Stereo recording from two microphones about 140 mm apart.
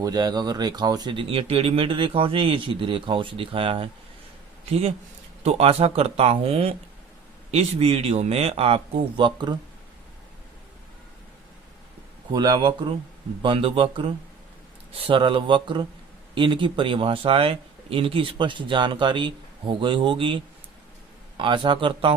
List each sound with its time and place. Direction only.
0.0 s speech: 30° right (ahead or behind)
12.3 s speech: 30° right (ahead or behind)